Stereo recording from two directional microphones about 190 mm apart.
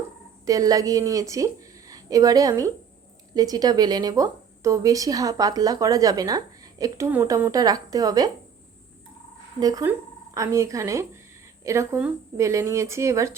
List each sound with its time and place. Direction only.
0.4 s a woman's voice: 20° right (ahead or behind)
9.6 s speech: 20° right (ahead or behind)